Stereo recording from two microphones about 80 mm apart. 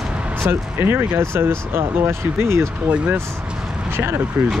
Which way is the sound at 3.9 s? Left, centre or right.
Right.